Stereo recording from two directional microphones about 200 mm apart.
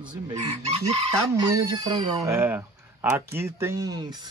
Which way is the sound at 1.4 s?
20° right (ahead or behind).